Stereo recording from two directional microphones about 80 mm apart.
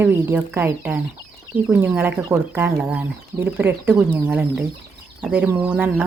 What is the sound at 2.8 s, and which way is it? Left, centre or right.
Speech, centre.